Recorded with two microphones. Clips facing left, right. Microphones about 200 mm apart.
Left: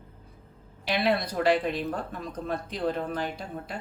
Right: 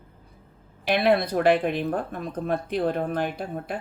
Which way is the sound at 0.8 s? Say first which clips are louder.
Right 5 dB; 55° right (ahead or behind).